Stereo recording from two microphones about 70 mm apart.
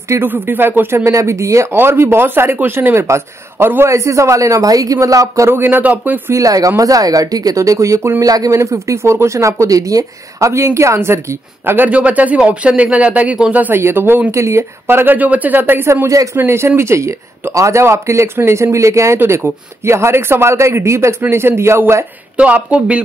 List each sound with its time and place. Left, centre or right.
0.2 s speech: right
1.7 s speech: right
3.9 s speech: right
5.5 s speech: right
6.3 s speech: right
8.5 s speech: right
11.9 s speech: centre
13.7 s speech: right
14.3 s speech: right
16.3 s speech: right
22.4 s speech: centre